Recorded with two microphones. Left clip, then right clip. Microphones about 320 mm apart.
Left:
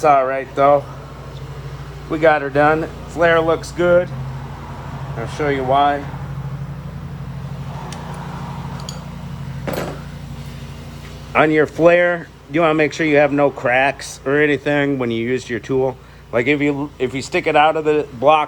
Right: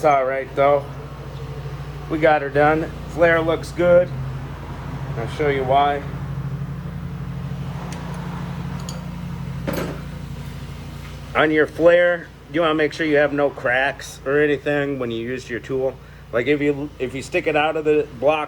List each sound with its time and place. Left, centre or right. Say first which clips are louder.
0.0 s speech: left 3 dB; left
2.0 s speech: left 2 dB; left
5.4 s speech: left 2 dB; left
11.5 s speech: even; left